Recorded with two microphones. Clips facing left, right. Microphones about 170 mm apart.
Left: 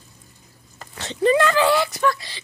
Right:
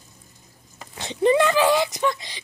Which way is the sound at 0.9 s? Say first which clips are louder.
Even; 15° right (ahead or behind).